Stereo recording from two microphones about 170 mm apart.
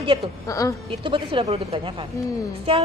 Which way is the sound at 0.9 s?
30° right (ahead or behind).